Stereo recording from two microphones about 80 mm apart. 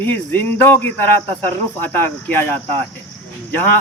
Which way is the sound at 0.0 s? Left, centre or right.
Left.